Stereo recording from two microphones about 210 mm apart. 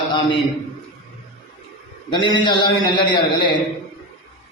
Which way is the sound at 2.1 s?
20° left (ahead or behind).